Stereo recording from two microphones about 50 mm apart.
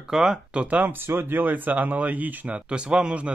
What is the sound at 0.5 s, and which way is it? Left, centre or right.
Speech, right.